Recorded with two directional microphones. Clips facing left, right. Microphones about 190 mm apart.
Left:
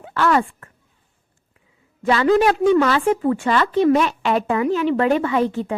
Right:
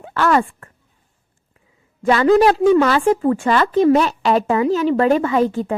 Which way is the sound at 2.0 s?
40° right (ahead or behind).